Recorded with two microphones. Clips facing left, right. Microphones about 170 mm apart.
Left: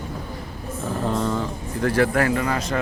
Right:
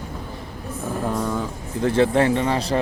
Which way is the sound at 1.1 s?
10° right (ahead or behind).